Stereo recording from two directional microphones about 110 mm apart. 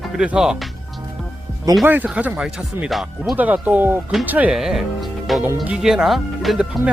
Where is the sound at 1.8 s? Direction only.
15° right (ahead or behind).